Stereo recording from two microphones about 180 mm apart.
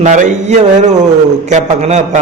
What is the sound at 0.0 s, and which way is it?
A man's voice, 40° right (ahead or behind).